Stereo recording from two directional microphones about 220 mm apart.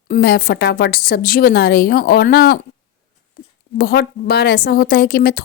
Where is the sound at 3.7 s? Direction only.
45° left (ahead or behind).